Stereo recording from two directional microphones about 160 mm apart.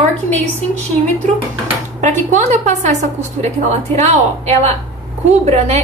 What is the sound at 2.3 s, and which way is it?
A woman's voice, 45° right (ahead or behind).